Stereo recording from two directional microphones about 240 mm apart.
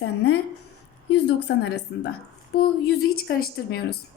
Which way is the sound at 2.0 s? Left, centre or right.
Left.